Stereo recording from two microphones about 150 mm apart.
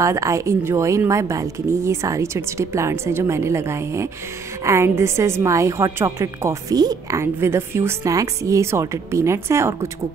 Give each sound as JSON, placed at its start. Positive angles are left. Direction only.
{"t": 0.0, "sound": "a woman's voice", "side_deg": -20}